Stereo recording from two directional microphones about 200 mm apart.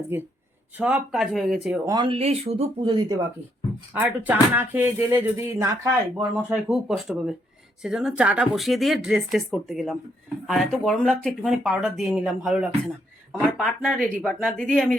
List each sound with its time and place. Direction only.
0.1 s speech: 10° right (ahead or behind)
1.9 s speech: 25° right (ahead or behind)
3.9 s speech: 10° right (ahead or behind)
6.5 s speech: centre (ahead or behind)